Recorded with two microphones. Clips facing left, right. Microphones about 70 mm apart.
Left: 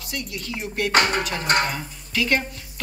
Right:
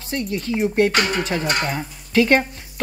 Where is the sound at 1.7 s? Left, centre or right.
Right.